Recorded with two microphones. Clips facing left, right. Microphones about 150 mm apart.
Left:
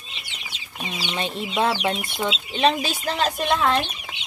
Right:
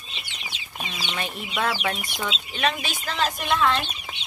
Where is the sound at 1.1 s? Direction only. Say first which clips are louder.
Left 5 dB; 25° left (ahead or behind).